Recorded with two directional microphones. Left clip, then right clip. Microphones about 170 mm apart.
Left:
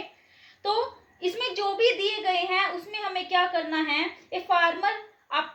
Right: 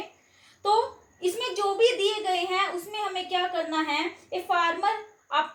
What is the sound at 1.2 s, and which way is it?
A woman's voice, 10° left (ahead or behind).